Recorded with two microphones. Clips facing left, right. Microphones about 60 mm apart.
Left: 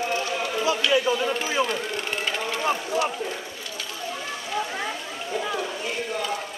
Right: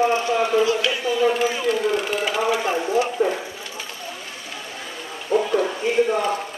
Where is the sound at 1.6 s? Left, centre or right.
Centre.